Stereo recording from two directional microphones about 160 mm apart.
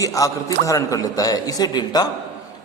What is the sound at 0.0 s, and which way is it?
A man's voice, 20° left (ahead or behind).